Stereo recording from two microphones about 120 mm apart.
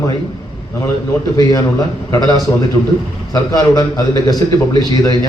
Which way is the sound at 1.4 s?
30° left (ahead or behind).